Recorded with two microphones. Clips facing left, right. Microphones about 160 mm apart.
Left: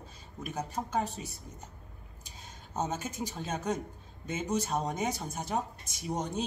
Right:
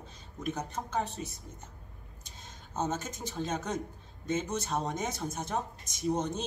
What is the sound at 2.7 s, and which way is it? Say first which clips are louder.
Speech: even; 10° left (ahead or behind).